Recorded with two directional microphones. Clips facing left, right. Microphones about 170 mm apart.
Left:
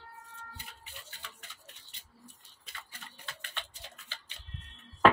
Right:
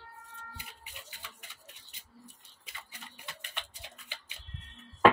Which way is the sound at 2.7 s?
15° right (ahead or behind).